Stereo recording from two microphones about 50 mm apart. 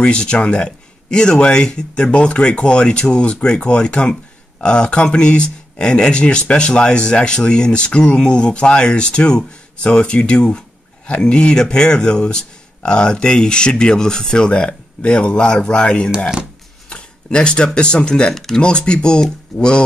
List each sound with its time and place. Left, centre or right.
0.0 s speech: left
16.9 s a sound: centre
17.7 s speech: centre
19.5 s speech: centre